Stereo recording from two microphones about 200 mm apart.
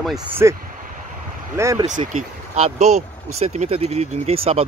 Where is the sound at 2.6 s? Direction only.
35° right (ahead or behind).